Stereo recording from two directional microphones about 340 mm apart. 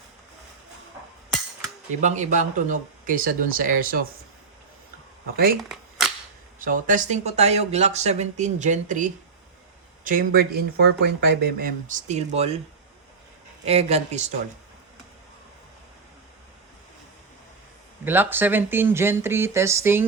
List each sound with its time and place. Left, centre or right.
2.0 s speech: right
6.7 s speech: right
13.7 s speech: centre
18.0 s speech: centre